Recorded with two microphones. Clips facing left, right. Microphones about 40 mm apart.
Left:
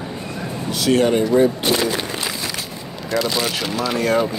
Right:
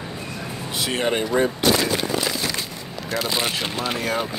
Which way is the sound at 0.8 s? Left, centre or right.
Right.